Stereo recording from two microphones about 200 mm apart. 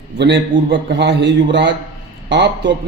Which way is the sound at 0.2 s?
60° right (ahead or behind).